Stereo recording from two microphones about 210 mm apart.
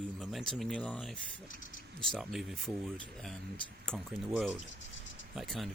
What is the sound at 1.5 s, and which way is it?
Speech, 40° left (ahead or behind).